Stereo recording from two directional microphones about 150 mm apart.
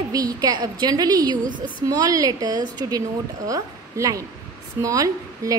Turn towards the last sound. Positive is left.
turn(degrees=-20)  # may be behind; listen again after turning